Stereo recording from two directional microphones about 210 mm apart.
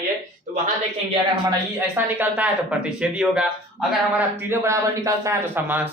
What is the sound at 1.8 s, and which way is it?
Speech, 10° right (ahead or behind).